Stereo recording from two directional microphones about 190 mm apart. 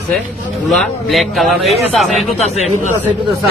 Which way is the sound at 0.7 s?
Centre (ahead or behind).